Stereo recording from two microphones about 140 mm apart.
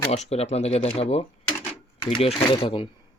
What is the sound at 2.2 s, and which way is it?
Speech, 45° left (ahead or behind).